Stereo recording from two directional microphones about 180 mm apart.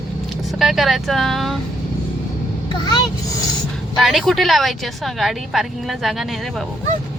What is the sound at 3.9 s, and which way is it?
A woman's voice, centre (ahead or behind).